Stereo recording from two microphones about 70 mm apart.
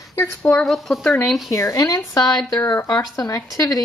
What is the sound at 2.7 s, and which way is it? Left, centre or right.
Speech, left.